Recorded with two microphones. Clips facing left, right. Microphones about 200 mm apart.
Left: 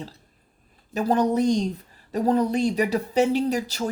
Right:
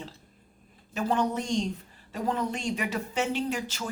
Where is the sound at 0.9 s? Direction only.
40° left (ahead or behind).